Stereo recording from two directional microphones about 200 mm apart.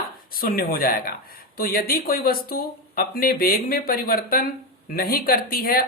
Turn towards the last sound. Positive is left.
turn(degrees=45)  # may be behind; listen again after turning